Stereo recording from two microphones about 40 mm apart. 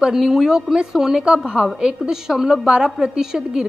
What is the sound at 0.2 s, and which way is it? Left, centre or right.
A woman's voice, centre.